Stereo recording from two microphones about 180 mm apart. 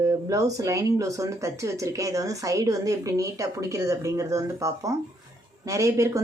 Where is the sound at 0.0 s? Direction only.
20° right (ahead or behind).